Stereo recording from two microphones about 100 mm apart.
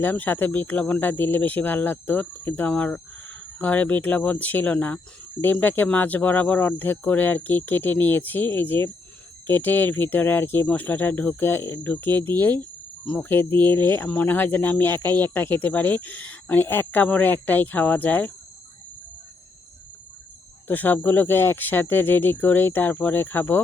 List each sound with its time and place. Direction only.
0.0 s speech: 20° left (ahead or behind)
20.7 s speech: 20° left (ahead or behind)